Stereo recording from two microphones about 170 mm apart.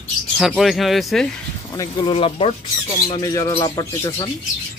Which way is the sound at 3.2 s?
20° left (ahead or behind).